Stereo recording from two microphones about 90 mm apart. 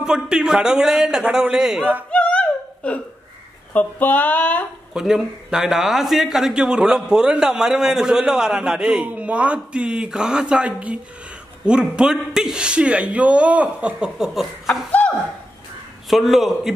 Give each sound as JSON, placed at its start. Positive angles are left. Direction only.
{"t": 0.0, "sound": "speech", "side_deg": -10}
{"t": 2.1, "sound": "whimper", "side_deg": 15}
{"t": 3.7, "sound": "speech", "side_deg": 20}
{"t": 4.9, "sound": "speech", "side_deg": -5}
{"t": 14.9, "sound": "a sound", "side_deg": 15}
{"t": 16.1, "sound": "a man's voice", "side_deg": 0}